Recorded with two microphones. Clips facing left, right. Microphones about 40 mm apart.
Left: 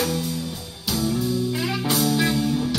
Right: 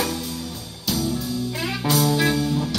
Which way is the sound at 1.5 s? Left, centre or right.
Centre.